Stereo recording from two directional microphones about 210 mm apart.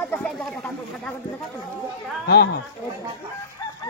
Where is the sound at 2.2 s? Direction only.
50° left (ahead or behind).